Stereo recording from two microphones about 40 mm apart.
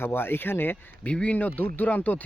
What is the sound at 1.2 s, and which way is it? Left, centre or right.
Speech, left.